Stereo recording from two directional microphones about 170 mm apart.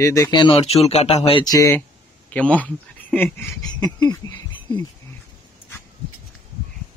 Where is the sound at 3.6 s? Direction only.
25° left (ahead or behind).